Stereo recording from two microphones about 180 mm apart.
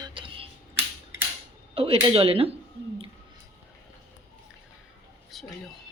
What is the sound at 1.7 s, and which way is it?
Speech, 30° right (ahead or behind).